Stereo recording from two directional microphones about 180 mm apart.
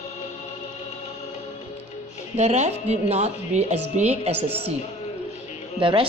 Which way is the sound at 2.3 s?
40° right (ahead or behind).